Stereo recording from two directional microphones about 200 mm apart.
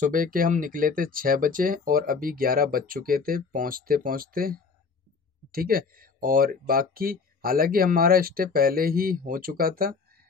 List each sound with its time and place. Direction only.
0.0 s speech: 45° right (ahead or behind)